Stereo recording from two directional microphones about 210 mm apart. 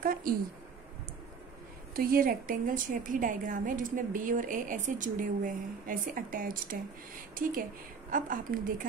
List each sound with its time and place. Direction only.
0.0 s speech: 40° right (ahead or behind)
2.0 s a woman's voice: 45° right (ahead or behind)
8.1 s a woman's voice: 40° right (ahead or behind)